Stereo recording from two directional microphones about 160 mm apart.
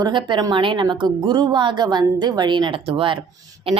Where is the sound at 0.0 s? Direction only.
30° right (ahead or behind).